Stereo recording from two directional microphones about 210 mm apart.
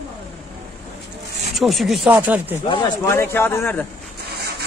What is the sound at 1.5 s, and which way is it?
Speech, centre (ahead or behind).